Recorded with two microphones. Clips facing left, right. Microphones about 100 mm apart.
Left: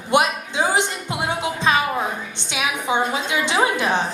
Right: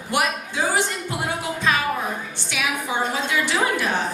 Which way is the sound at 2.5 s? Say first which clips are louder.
Left 3 dB; 20° left (ahead or behind).